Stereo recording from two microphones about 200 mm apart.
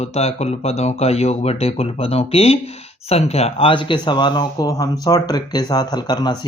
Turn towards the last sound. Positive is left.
turn(degrees=20)  # may be behind; listen again after turning